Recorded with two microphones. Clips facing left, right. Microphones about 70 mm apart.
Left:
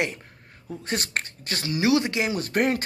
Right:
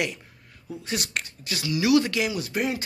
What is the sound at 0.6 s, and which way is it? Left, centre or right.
Speech, left.